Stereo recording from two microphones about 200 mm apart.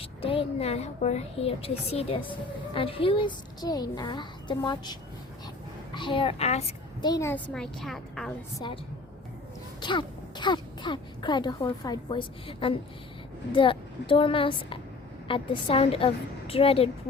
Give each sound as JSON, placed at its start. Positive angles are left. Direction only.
{"t": 0.0, "sound": "speech", "side_deg": 25}
{"t": 7.0, "sound": "a woman's voice", "side_deg": 15}
{"t": 8.5, "sound": "speech", "side_deg": 25}
{"t": 9.8, "sound": "speech", "side_deg": 25}